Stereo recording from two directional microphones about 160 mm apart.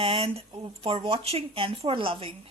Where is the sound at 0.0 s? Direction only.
35° right (ahead or behind).